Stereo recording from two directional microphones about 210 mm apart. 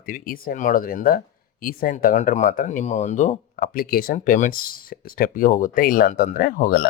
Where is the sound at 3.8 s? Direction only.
45° left (ahead or behind).